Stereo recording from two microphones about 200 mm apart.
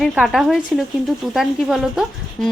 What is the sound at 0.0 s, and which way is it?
Speech, centre (ahead or behind).